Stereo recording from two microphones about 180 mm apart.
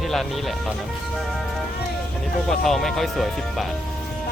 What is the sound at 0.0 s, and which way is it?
Speech, centre (ahead or behind).